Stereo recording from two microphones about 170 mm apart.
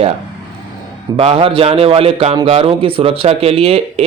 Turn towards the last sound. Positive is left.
turn(degrees=-35)  # may be behind; listen again after turning